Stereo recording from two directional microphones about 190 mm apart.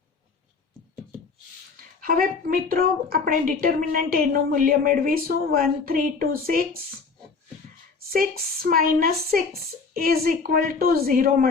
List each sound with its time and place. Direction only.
1.7 s a woman's voice: 50° right (ahead or behind)
8.1 s a woman's voice: 50° right (ahead or behind)